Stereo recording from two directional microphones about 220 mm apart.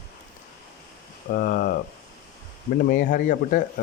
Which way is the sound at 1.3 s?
40° left (ahead or behind).